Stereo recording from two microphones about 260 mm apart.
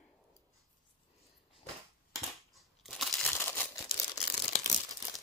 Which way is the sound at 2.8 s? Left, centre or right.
Centre.